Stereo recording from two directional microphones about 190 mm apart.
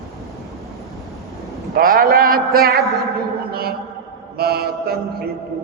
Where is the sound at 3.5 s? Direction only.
55° right (ahead or behind).